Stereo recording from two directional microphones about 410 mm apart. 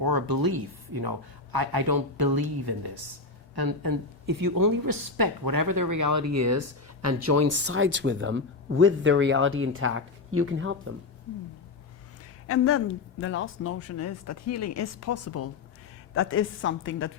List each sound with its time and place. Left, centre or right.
0.0 s a woman's voice: right
12.5 s speech: left